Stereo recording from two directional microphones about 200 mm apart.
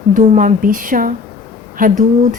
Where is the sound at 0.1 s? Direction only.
40° right (ahead or behind).